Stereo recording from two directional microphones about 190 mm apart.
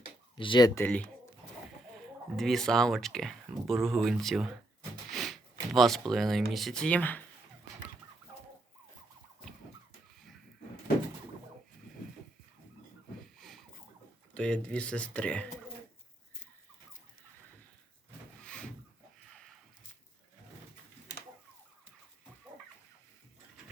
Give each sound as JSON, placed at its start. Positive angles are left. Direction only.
{"t": 0.3, "sound": "speech", "side_deg": 25}
{"t": 0.8, "sound": "speech", "side_deg": 5}
{"t": 14.3, "sound": "speech", "side_deg": 5}
{"t": 18.4, "sound": "a sound", "side_deg": 5}